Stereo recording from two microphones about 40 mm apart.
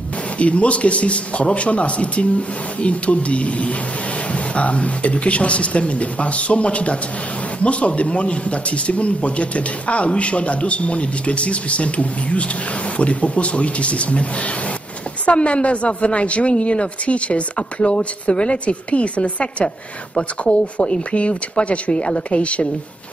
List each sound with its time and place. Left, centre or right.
0.4 s speech: left
15.2 s speech: left